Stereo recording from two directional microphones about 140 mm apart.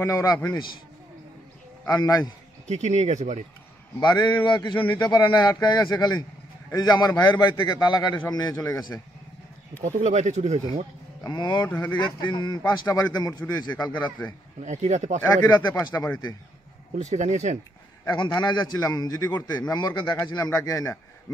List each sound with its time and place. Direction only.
0.0 s a man's voice: 25° left (ahead or behind)
1.9 s a man's voice: 25° left (ahead or behind)
2.7 s speech: 55° right (ahead or behind)
4.0 s a man's voice: 35° left (ahead or behind)
9.8 s speech: 60° right (ahead or behind)
11.2 s speech: 30° left (ahead or behind)
11.6 s speech: 15° left (ahead or behind)
12.0 s a man's voice: 30° left (ahead or behind)
13.9 s speech: 10° left (ahead or behind)
14.6 s speech: 55° right (ahead or behind)
15.5 s a man's voice: 25° left (ahead or behind)
16.9 s speech: 55° right (ahead or behind)
18.0 s a man's voice: 30° left (ahead or behind)